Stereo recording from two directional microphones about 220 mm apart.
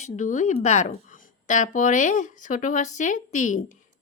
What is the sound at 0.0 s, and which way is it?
Speech, 35° left (ahead or behind).